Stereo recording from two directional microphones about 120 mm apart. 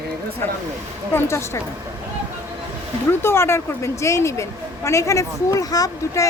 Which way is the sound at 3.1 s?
20° left (ahead or behind).